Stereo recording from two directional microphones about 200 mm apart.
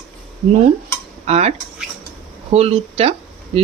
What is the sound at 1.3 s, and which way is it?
Speech, 35° right (ahead or behind).